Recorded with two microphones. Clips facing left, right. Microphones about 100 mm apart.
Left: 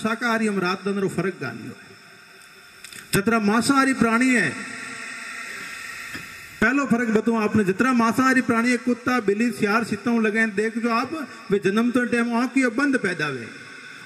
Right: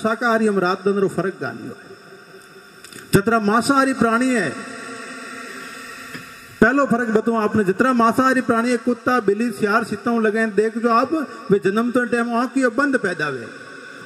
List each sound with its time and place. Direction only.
0.0 s a man's voice: 40° right (ahead or behind)
3.1 s a sound: 40° right (ahead or behind)
6.6 s a man's voice: 40° right (ahead or behind)